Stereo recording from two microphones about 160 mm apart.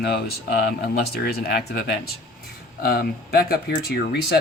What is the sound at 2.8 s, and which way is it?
Speech, 70° left (ahead or behind).